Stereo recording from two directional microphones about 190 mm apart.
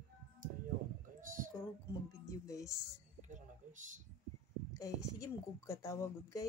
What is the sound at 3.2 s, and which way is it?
Speech, 40° right (ahead or behind).